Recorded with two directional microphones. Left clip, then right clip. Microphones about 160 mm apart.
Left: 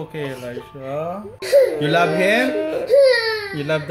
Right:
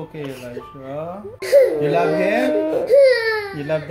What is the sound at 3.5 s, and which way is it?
Music, 45° left (ahead or behind).